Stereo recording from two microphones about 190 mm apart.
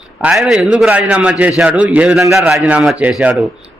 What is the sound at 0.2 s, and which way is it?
A man's voice, 5° right (ahead or behind).